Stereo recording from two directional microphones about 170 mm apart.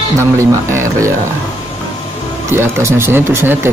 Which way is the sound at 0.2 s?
15° right (ahead or behind).